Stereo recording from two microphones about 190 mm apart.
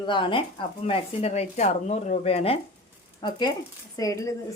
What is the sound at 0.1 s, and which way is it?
A woman's voice, 25° left (ahead or behind).